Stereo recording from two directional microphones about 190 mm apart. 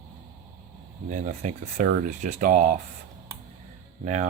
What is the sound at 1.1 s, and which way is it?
Speech, 40° right (ahead or behind).